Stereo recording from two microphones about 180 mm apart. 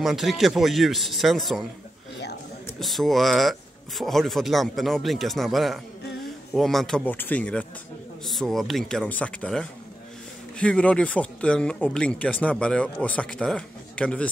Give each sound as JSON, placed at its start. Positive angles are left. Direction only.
{"t": 0.0, "sound": "speech", "side_deg": 0}
{"t": 2.8, "sound": "speech", "side_deg": 0}